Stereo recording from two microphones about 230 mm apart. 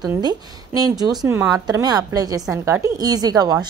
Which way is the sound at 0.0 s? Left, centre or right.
Centre.